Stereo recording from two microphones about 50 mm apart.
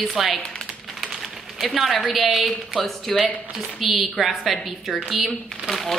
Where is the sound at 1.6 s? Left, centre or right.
Centre.